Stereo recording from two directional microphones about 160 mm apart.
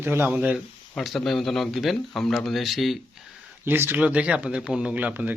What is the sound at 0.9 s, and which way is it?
Speech, centre (ahead or behind).